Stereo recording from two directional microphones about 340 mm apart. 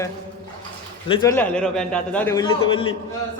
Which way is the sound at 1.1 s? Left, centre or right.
Centre.